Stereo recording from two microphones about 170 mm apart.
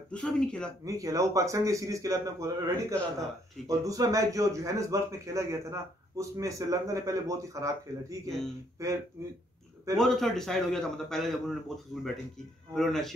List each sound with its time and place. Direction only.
0.1 s a man's voice: 5° left (ahead or behind)
0.8 s a man's voice: 20° right (ahead or behind)
9.9 s a man's voice: centre (ahead or behind)